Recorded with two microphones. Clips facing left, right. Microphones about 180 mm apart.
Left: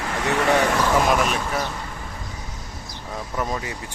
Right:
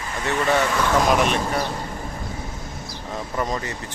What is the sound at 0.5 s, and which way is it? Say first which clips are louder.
Speech: even; 5° left (ahead or behind).